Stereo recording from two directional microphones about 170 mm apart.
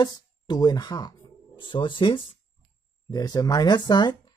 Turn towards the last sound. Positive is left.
turn(degrees=25)  # may be behind; listen again after turning